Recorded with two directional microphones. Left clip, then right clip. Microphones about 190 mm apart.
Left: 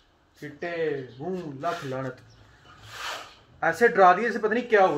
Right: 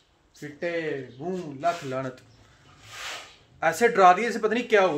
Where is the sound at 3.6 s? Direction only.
10° right (ahead or behind).